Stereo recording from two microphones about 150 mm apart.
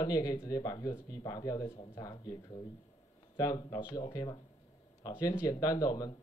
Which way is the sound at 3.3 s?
25° left (ahead or behind).